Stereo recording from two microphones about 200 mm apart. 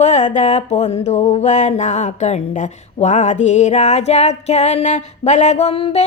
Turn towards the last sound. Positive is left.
turn(degrees=30)  # may be behind; listen again after turning